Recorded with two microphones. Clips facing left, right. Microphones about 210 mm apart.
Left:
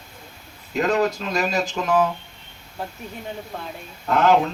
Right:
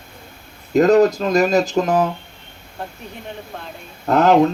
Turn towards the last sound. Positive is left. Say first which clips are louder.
# right 4 dB
turn(degrees=-45)  # may be behind; listen again after turning